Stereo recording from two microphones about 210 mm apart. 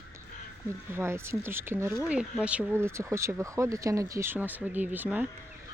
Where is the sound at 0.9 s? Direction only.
10° right (ahead or behind).